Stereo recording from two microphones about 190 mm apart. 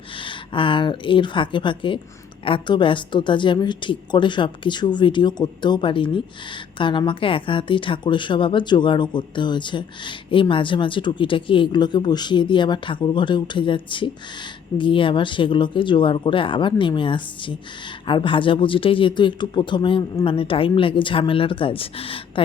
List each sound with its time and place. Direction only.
0.2 s a woman's voice: 25° left (ahead or behind)